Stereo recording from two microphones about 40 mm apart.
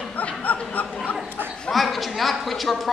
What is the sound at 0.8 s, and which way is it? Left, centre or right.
Dog, left.